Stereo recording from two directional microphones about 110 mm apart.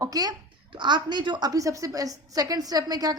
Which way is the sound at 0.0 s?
35° right (ahead or behind).